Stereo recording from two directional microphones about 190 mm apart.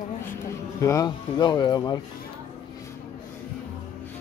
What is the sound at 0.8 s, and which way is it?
Speech, 15° left (ahead or behind).